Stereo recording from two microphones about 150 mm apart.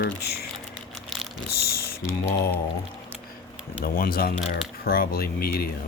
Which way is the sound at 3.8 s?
75° left (ahead or behind).